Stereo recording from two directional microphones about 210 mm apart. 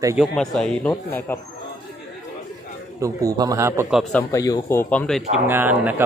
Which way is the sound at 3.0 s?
15° right (ahead or behind).